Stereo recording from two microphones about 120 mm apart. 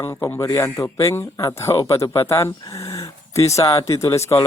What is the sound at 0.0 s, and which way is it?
A man's voice, 20° left (ahead or behind).